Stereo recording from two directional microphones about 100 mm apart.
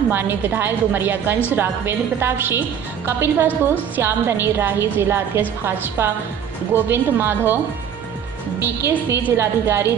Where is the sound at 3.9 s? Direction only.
20° right (ahead or behind).